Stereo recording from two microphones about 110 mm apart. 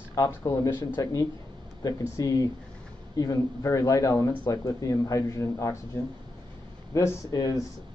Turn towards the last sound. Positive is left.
turn(degrees=35)  # may be behind; listen again after turning